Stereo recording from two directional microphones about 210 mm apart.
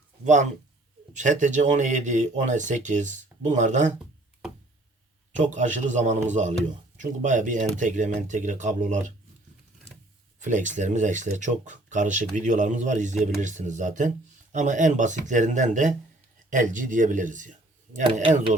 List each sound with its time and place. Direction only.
1.1 s speech: 35° right (ahead or behind)
5.4 s speech: 35° right (ahead or behind)
10.4 s speech: 35° right (ahead or behind)